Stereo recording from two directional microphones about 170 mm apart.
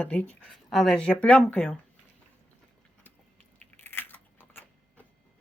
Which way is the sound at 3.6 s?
10° left (ahead or behind).